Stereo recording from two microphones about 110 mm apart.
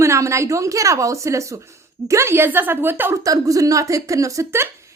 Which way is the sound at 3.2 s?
30° right (ahead or behind).